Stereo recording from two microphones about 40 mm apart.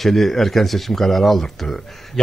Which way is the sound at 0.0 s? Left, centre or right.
Centre.